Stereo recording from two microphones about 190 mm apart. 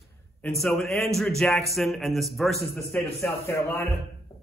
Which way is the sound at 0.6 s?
Centre (ahead or behind).